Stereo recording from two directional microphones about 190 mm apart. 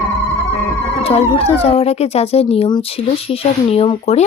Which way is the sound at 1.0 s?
30° left (ahead or behind).